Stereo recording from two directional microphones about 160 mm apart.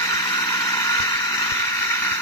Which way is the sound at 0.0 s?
20° left (ahead or behind).